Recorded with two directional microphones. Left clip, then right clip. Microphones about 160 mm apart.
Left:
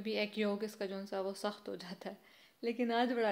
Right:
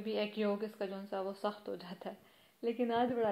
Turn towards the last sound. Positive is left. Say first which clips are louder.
# even
turn(degrees=20)  # may be behind; listen again after turning